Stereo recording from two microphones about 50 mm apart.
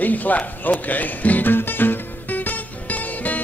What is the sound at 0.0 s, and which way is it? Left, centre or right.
Music, left.